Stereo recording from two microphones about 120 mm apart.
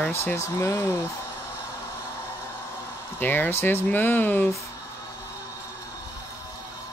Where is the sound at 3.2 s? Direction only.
15° left (ahead or behind).